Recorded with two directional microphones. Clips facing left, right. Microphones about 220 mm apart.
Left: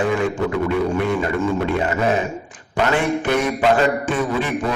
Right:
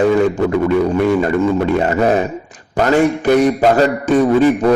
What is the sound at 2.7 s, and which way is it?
Speech, 40° right (ahead or behind).